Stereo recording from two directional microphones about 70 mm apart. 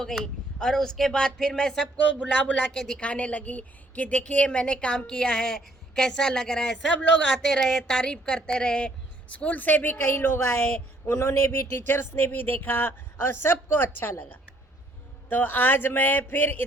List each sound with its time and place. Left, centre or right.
0.0 s a woman's voice: centre
2.7 s a woman's voice: centre
3.0 s a woman's voice: centre